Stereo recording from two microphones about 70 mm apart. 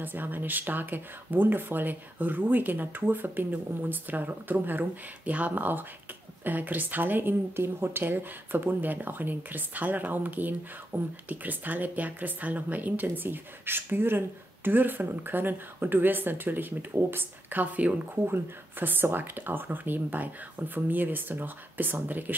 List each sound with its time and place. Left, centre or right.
0.0 s a woman's voice: right
18.2 s a woman's voice: right